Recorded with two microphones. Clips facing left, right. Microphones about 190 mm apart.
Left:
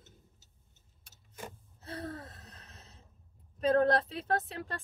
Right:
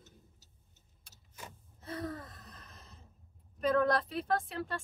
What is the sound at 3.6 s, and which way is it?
Speech, 30° left (ahead or behind).